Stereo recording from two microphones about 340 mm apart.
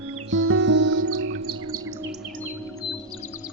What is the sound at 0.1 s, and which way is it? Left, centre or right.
Chirp, right.